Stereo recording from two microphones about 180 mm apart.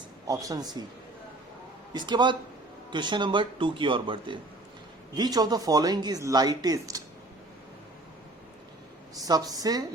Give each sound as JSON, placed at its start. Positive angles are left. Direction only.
{"t": 0.3, "sound": "speech", "side_deg": -20}
{"t": 1.9, "sound": "speech", "side_deg": -25}
{"t": 9.1, "sound": "speech", "side_deg": -20}